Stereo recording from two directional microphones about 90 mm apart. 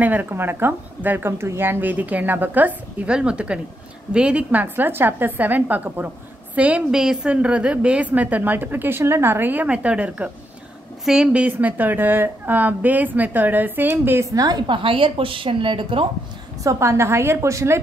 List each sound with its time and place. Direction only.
0.0 s a woman's voice: 20° right (ahead or behind)
11.5 s a woman's voice: 20° right (ahead or behind)
14.3 s a woman's voice: 45° right (ahead or behind)
14.7 s a woman's voice: 75° right (ahead or behind)
16.6 s a woman's voice: 30° right (ahead or behind)